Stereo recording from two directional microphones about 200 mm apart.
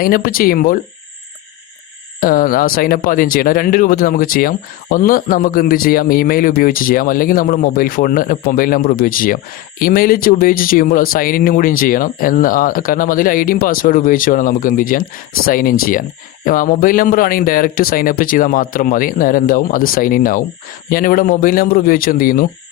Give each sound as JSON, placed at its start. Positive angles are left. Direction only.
{"t": 0.0, "sound": "speech", "side_deg": 45}
{"t": 2.2, "sound": "speech", "side_deg": 45}